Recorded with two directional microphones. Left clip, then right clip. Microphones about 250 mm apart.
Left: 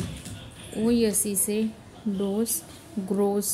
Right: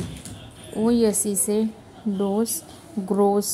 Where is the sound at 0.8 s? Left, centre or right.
Centre.